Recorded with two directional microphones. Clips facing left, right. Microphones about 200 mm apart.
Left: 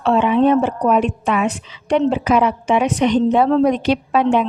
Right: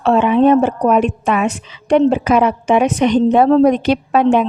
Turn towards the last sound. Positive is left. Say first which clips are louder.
# right 3 dB
turn(degrees=-45)  # may be behind; listen again after turning